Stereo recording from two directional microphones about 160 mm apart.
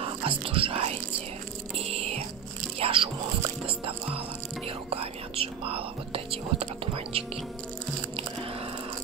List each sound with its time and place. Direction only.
0.0 s whispering: 35° right (ahead or behind)
1.9 s music: 40° right (ahead or behind)
4.8 s whispering: 35° right (ahead or behind)